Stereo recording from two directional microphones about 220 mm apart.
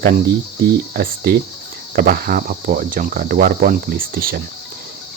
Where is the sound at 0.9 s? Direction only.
45° right (ahead or behind).